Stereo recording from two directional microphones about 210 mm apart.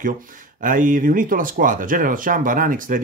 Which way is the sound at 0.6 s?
40° right (ahead or behind).